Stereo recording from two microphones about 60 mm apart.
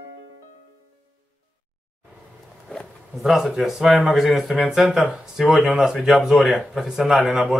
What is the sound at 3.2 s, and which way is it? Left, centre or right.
Speech, centre.